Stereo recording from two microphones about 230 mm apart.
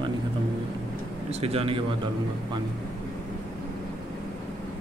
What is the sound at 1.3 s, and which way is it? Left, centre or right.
Speech, right.